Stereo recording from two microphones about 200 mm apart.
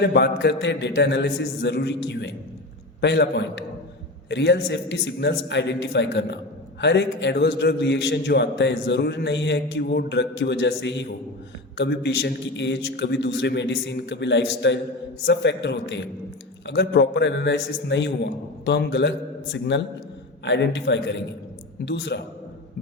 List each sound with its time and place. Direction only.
0.0 s a man's voice: 55° left (ahead or behind)